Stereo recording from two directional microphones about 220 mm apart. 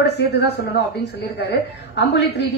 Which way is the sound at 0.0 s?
50° left (ahead or behind).